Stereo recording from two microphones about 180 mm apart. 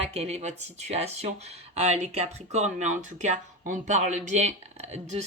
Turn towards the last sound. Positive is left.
turn(degrees=-40)  # may be behind; listen again after turning